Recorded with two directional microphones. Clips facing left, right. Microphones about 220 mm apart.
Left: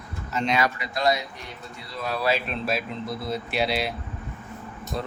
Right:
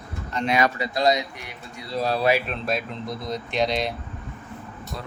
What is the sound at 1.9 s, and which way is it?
Speech, 35° right (ahead or behind).